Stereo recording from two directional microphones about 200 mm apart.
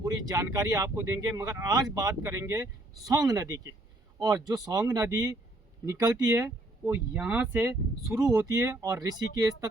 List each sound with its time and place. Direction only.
0.0 s speech: 20° right (ahead or behind)